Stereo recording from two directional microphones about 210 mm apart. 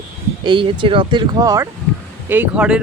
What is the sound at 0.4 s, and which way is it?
Speech, 25° right (ahead or behind).